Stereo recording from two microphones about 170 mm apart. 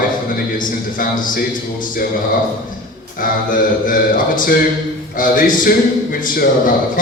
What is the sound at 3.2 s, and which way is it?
A man's voice, 55° left (ahead or behind).